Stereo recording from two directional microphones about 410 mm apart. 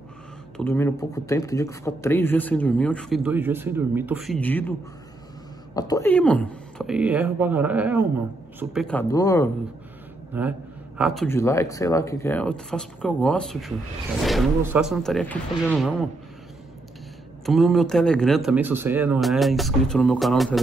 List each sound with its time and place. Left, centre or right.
0.6 s speech: centre
5.8 s speech: centre
11.0 s speech: centre
17.5 s speech: centre